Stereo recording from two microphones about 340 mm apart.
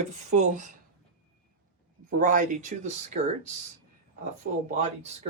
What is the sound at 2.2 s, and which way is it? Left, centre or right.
Speech, right.